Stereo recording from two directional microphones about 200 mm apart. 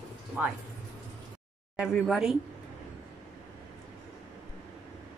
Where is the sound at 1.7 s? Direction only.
Centre (ahead or behind).